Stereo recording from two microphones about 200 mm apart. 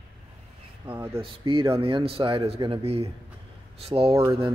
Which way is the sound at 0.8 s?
10° right (ahead or behind).